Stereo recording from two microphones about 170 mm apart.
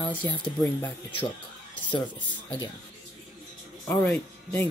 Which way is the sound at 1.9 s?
30° left (ahead or behind).